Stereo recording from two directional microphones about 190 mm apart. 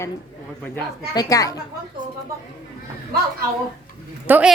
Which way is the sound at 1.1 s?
20° left (ahead or behind).